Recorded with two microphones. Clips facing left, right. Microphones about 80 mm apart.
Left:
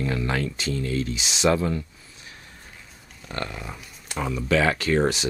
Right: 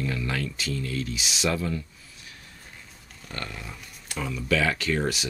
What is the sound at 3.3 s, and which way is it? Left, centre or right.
Speech, left.